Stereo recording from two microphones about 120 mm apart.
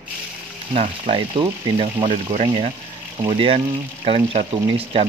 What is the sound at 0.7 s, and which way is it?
Speech, 50° right (ahead or behind).